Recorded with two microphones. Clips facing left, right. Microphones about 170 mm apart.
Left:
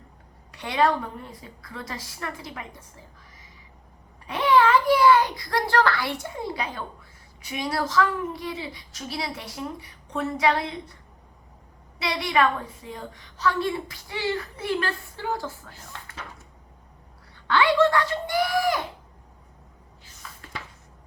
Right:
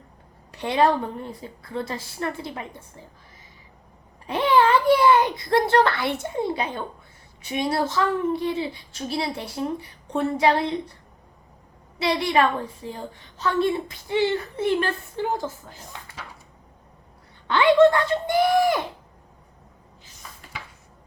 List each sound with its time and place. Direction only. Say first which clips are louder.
0.5 s a woman's voice: right 3 dB; 30° right (ahead or behind)
4.3 s a woman's voice: right 1 dB; 30° right (ahead or behind)
11.9 s a woman's voice: right 3 dB; 30° right (ahead or behind); by 16.2 s 15° right (ahead or behind)
17.5 s a woman's voice: right 4 dB; 20° right (ahead or behind)